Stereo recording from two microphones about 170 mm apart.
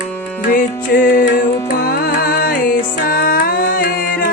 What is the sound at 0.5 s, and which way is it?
Music, 55° left (ahead or behind).